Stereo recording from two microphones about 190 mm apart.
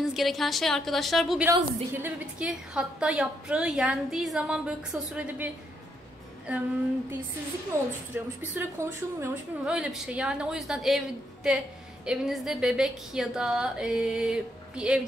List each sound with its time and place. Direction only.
0.0 s a woman's voice: centre (ahead or behind)
7.7 s a woman's voice: 15° right (ahead or behind)